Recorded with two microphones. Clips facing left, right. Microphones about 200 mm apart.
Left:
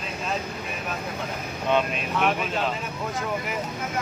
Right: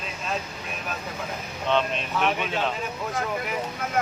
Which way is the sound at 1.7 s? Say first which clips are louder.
Left 1 dB; 10° left (ahead or behind).